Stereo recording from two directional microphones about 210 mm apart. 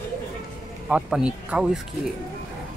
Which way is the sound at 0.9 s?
5° right (ahead or behind).